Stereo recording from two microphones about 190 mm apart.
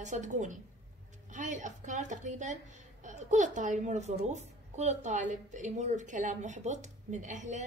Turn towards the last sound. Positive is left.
turn(degrees=-40)  # may be behind; listen again after turning